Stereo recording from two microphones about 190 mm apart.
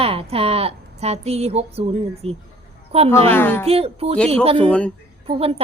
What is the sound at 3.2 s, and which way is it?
Speech, 10° left (ahead or behind).